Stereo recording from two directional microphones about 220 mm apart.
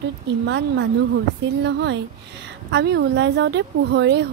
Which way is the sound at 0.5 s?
55° right (ahead or behind).